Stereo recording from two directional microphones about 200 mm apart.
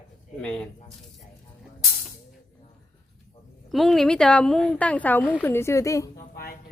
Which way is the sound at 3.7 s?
Centre (ahead or behind).